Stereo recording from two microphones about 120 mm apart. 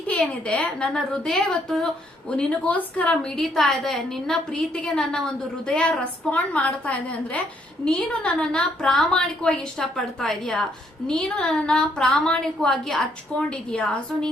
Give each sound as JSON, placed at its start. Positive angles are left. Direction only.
{"t": 0.1, "sound": "a woman's voice", "side_deg": 10}